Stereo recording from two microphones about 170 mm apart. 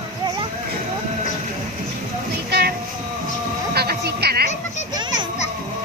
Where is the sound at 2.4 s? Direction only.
70° right (ahead or behind).